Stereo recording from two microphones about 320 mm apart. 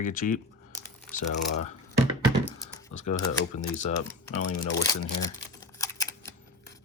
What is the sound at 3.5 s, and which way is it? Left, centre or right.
Speech, left.